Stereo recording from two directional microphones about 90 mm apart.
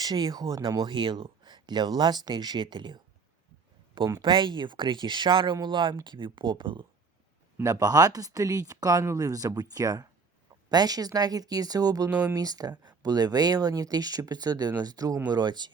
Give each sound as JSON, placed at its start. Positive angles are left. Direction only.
{"t": 0.0, "sound": "speech", "side_deg": -45}
{"t": 0.9, "sound": "speech", "side_deg": -65}
{"t": 4.2, "sound": "speech", "side_deg": -60}
{"t": 7.6, "sound": "speech", "side_deg": -40}